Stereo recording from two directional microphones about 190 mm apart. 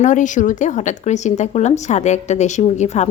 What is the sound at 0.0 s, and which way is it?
Speech, 40° left (ahead or behind).